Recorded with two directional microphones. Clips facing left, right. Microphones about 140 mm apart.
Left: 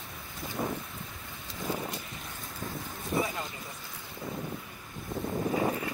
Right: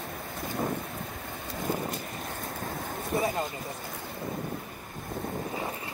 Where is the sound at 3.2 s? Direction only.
50° right (ahead or behind).